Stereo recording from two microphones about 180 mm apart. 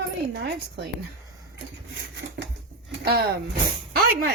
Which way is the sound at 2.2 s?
80° right.